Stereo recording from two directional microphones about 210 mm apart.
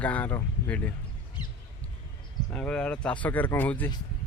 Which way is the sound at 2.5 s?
5° left (ahead or behind).